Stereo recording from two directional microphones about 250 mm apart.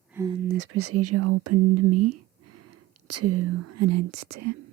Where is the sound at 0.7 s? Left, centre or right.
Right.